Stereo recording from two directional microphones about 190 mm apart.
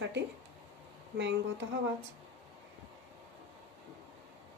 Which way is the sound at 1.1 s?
65° right (ahead or behind).